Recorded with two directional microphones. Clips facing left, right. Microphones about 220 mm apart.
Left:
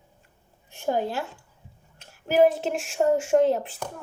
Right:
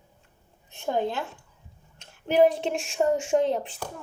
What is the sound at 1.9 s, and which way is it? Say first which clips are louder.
Speech: even; 5° left (ahead or behind).